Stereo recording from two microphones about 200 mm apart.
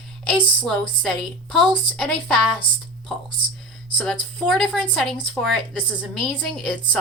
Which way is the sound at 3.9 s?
Centre (ahead or behind).